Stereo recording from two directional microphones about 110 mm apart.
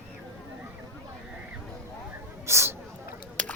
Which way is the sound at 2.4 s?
25° right (ahead or behind).